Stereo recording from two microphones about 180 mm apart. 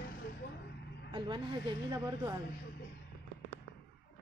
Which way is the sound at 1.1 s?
25° right (ahead or behind).